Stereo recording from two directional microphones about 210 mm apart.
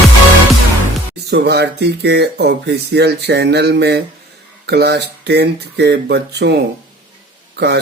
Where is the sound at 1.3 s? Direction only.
50° right (ahead or behind).